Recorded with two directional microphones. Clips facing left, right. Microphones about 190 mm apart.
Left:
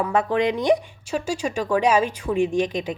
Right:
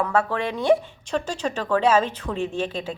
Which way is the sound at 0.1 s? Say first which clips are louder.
Left 3 dB; 15° left (ahead or behind).